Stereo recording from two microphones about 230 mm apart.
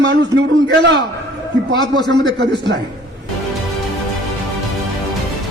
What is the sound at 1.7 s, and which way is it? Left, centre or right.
Speech, centre.